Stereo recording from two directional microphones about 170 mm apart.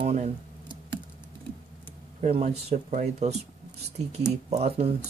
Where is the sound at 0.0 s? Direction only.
40° right (ahead or behind).